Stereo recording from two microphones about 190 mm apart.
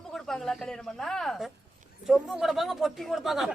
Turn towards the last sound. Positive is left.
turn(degrees=0)  # may be behind; listen again after turning